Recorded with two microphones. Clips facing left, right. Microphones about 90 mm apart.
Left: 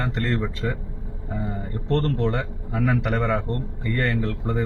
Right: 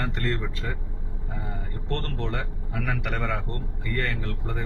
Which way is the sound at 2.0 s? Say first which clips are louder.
Left 9 dB; 35° left (ahead or behind).